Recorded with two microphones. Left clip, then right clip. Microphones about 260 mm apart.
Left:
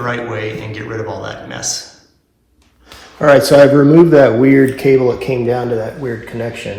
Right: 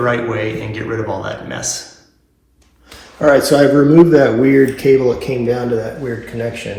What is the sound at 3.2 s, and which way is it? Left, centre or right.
Speech, left.